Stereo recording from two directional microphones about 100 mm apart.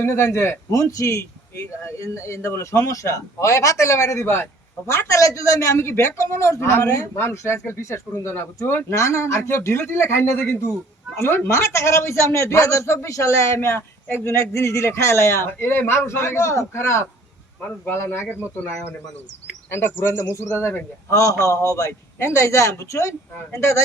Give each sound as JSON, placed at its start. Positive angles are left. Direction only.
{"t": 0.0, "sound": "a man's voice", "side_deg": 25}